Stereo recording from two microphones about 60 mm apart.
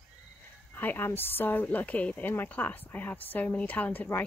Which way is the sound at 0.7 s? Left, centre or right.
Left.